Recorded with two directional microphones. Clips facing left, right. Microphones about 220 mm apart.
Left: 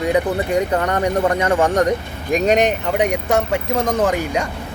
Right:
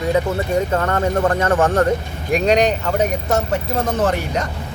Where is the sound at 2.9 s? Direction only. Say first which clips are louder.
Left 1 dB; 15° left (ahead or behind).